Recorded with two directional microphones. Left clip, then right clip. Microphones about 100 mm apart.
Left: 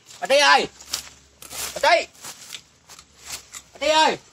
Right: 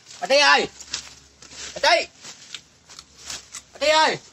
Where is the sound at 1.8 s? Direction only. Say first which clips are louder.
Left 1 dB; 25° left (ahead or behind).